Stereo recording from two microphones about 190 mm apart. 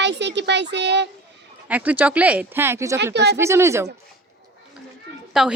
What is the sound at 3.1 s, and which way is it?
Speech, 60° right (ahead or behind).